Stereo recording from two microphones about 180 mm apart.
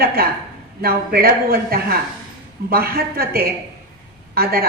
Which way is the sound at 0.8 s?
55° right (ahead or behind).